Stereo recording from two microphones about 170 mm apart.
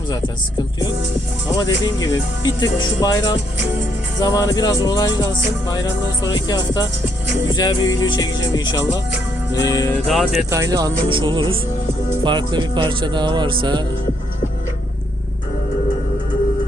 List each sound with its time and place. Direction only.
1.5 s speech: 25° left (ahead or behind)
9.9 s speech: centre (ahead or behind)
10.5 s speech: 20° right (ahead or behind)